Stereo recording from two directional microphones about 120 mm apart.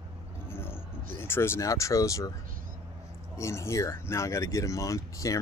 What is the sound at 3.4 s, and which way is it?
Speech, 25° left (ahead or behind).